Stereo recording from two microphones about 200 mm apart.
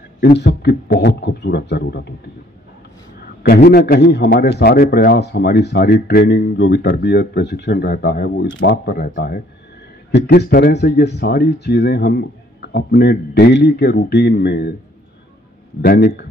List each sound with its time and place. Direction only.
0.2 s speech: 55° left (ahead or behind)
3.2 s a man's voice: 50° left (ahead or behind)
15.8 s a man's voice: 50° left (ahead or behind)